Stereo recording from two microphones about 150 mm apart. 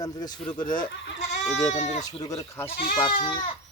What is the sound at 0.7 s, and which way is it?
Speech, 65° left (ahead or behind).